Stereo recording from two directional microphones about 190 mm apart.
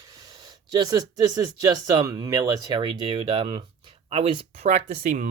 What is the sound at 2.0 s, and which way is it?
Speech, 20° right (ahead or behind).